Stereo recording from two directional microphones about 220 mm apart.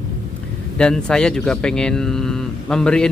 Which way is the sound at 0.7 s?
5° left (ahead or behind).